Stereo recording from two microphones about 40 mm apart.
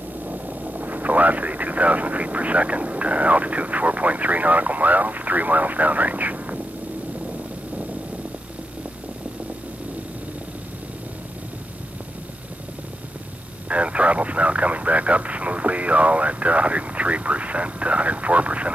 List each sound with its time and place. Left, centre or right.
0.3 s speech: right
13.7 s vehicle: right